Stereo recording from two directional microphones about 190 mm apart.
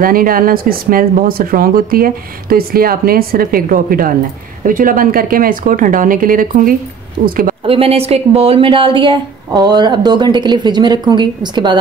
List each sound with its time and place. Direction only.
0.0 s speech: 50° right (ahead or behind)
7.6 s a woman's voice: 30° right (ahead or behind)